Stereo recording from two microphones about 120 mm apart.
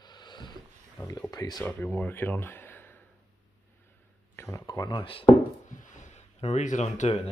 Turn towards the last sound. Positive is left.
turn(degrees=65)  # may be behind; listen again after turning